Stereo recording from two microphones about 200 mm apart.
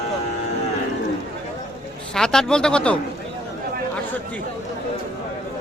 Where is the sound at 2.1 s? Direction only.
5° left (ahead or behind).